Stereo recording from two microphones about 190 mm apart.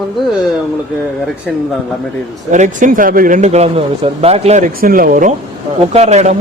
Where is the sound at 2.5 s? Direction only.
40° right (ahead or behind).